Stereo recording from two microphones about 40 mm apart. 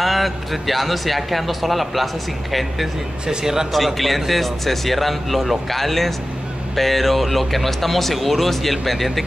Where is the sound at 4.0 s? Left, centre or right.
Centre.